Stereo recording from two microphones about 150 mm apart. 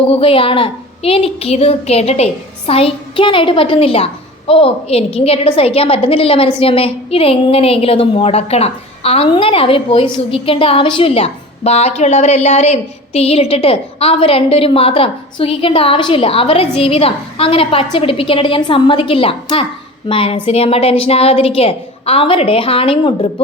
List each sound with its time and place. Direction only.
0.1 s a woman's voice: 35° left (ahead or behind)